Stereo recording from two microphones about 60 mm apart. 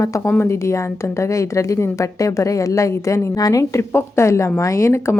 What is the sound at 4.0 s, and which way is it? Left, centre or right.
A woman's voice, left.